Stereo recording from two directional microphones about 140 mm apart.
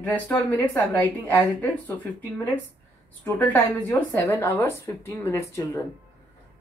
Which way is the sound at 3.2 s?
15° left (ahead or behind).